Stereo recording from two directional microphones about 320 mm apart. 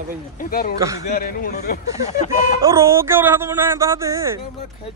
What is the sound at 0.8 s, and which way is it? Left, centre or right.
Speech, centre.